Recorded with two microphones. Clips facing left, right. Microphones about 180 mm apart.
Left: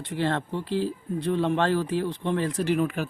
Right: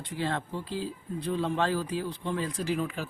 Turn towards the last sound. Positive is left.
turn(degrees=65)  # may be behind; listen again after turning